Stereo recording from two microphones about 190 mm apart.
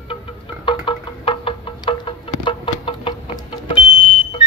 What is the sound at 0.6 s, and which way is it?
Music, 25° left (ahead or behind).